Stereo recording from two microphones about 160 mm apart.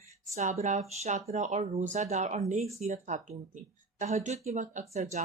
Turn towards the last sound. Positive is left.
turn(degrees=-50)  # may be behind; listen again after turning